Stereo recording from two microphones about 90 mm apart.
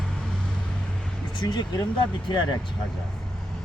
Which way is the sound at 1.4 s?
50° left (ahead or behind).